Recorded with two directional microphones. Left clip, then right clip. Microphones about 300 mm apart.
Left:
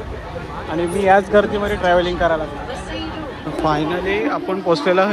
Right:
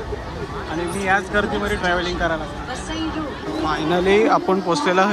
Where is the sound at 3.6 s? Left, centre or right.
Centre.